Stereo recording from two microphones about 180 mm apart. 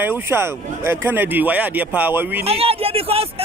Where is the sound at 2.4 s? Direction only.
35° right (ahead or behind).